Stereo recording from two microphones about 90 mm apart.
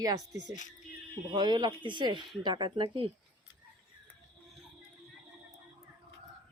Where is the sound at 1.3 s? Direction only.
60° right (ahead or behind).